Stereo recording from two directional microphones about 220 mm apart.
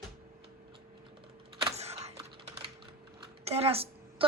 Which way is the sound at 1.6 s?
30° right (ahead or behind).